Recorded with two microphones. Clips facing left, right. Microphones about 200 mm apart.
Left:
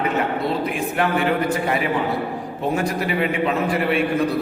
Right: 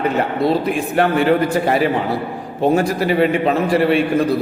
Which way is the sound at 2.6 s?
35° right (ahead or behind).